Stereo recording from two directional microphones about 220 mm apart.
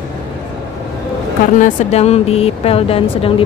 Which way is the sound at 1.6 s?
30° left (ahead or behind).